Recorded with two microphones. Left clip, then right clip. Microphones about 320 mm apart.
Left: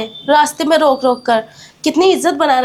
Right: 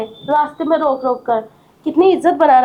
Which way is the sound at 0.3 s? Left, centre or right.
Left.